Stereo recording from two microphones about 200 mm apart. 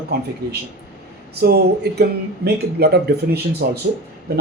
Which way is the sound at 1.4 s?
55° right (ahead or behind).